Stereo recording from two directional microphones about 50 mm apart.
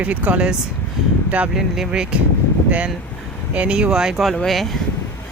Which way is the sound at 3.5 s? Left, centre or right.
Right.